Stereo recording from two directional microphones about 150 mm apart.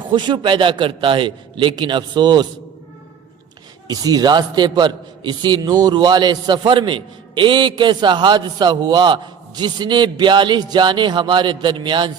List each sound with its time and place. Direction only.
0.1 s a man's voice: 30° right (ahead or behind)
3.8 s a man's voice: 25° right (ahead or behind)